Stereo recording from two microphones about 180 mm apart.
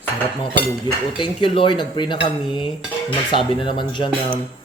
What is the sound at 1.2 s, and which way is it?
Speech, 30° left (ahead or behind).